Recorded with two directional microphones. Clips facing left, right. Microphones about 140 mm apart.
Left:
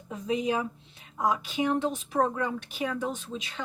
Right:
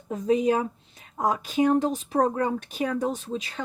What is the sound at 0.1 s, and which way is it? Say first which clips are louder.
A woman's voice: right 6 dB; 45° right (ahead or behind).